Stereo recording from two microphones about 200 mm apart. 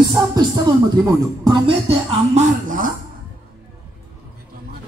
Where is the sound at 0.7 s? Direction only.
20° right (ahead or behind).